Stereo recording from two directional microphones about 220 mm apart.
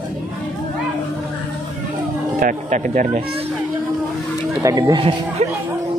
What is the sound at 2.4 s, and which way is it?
Speech, 35° right (ahead or behind).